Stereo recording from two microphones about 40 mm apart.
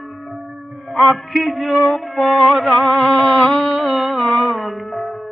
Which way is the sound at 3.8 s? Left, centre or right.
Centre.